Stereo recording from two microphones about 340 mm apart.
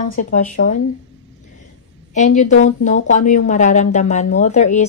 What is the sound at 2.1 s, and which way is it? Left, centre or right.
Speech, left.